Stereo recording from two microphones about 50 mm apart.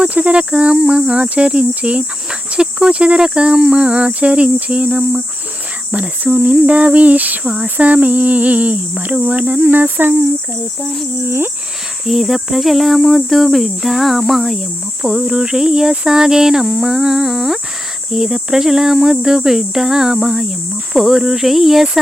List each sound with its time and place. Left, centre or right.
0.0 s cricket: right
7.4 s cricket: right
12.0 s speech: centre